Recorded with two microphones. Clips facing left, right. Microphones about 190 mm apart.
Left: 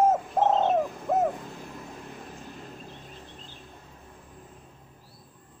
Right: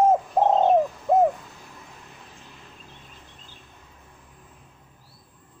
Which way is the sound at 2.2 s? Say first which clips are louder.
Left 6 dB; 45° left (ahead or behind).